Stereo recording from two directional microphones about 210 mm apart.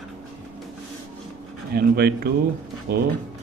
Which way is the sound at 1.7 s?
50° right (ahead or behind).